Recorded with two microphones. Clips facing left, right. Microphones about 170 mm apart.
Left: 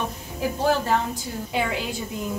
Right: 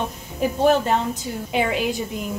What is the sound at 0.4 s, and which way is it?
A woman's voice, 20° right (ahead or behind).